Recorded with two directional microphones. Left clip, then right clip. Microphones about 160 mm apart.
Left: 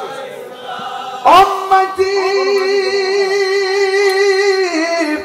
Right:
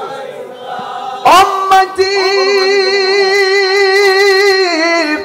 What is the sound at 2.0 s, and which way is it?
Music, 25° right (ahead or behind).